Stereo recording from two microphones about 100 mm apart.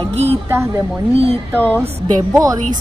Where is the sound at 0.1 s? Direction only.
90° right.